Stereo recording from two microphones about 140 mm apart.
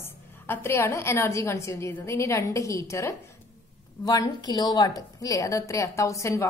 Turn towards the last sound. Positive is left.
turn(degrees=20)  # may be behind; listen again after turning